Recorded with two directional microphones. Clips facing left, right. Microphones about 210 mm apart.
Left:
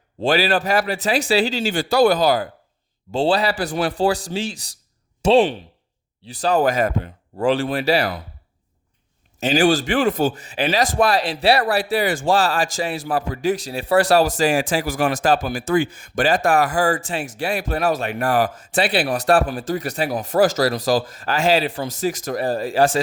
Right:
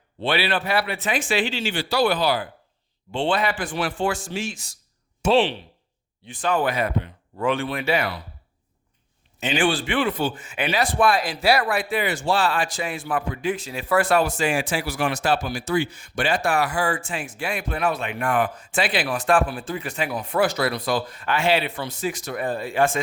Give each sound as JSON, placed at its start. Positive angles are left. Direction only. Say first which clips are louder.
{"t": 0.2, "sound": "speech", "louder": "left 5 dB", "side_deg": 40}
{"t": 9.4, "sound": "speech", "louder": "left 5 dB", "side_deg": 40}